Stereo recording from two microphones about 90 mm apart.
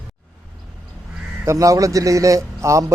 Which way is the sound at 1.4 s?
35° right (ahead or behind).